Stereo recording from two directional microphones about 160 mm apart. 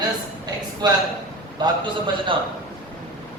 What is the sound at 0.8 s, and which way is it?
A man's voice, 25° right (ahead or behind).